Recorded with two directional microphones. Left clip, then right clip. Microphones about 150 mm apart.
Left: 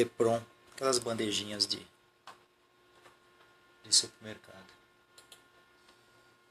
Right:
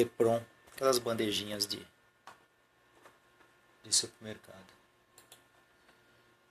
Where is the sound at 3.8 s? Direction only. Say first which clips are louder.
Left 4 dB; 30° right (ahead or behind).